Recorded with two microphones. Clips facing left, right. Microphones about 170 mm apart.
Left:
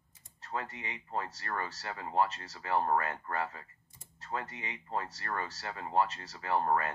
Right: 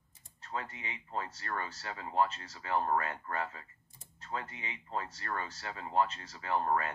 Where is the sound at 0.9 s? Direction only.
40° left (ahead or behind).